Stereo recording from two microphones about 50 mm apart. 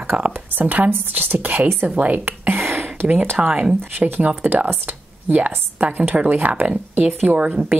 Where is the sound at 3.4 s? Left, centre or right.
Right.